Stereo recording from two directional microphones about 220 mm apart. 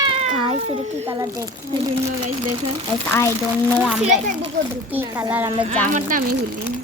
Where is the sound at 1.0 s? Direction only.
15° right (ahead or behind).